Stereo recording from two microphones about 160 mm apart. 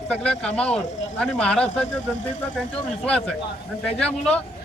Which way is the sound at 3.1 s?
5° left (ahead or behind).